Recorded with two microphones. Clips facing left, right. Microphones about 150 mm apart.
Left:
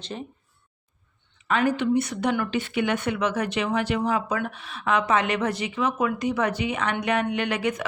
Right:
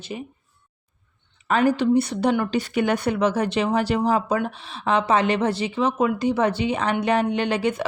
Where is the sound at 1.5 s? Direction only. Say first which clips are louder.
Right 4 dB; 35° right (ahead or behind).